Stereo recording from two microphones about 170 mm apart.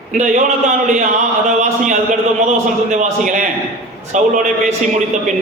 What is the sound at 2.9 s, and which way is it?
A man's voice, 50° right (ahead or behind).